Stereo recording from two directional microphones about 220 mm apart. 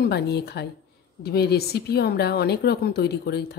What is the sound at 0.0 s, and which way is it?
Speech, 45° left (ahead or behind).